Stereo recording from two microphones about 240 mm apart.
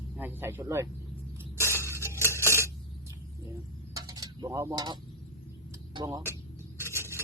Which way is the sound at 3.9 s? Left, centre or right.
Centre.